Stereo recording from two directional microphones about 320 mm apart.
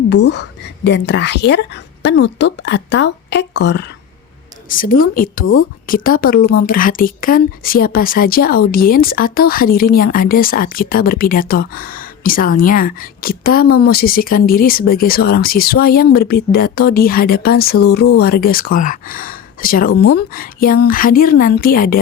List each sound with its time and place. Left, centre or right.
0.1 s a woman's voice: left